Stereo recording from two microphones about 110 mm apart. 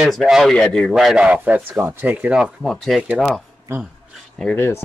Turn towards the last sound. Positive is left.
turn(degrees=20)  # may be behind; listen again after turning